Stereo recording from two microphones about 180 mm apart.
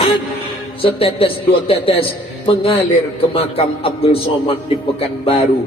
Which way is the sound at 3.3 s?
30° left (ahead or behind).